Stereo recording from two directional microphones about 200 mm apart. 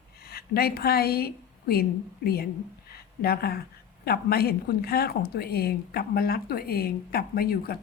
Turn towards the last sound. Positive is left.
turn(degrees=50)  # may be behind; listen again after turning